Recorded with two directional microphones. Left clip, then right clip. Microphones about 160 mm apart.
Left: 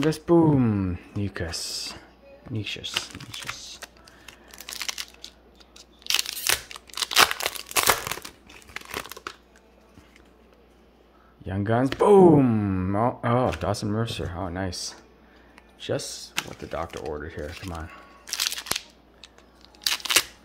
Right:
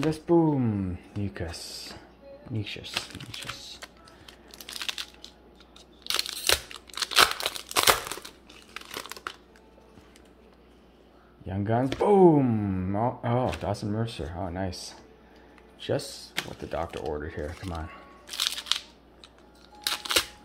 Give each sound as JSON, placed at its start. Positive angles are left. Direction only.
{"t": 0.1, "sound": "speech", "side_deg": 35}
{"t": 3.2, "sound": "typing", "side_deg": 15}
{"t": 4.5, "sound": "crunch", "side_deg": 15}
{"t": 11.4, "sound": "speech", "side_deg": 25}
{"t": 15.8, "sound": "speech", "side_deg": 10}
{"t": 18.2, "sound": "crunch", "side_deg": 25}
{"t": 19.8, "sound": "camera", "side_deg": 25}